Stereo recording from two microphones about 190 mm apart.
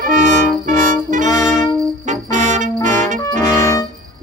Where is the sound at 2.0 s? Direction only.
40° right (ahead or behind).